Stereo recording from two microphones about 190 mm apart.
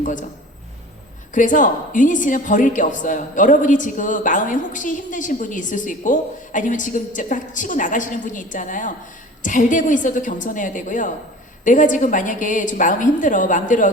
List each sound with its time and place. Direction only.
0.0 s a man's voice: 45° left (ahead or behind)
1.3 s a woman's voice: 45° left (ahead or behind)